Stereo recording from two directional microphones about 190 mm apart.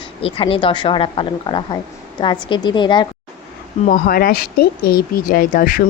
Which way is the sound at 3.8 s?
50° left (ahead or behind).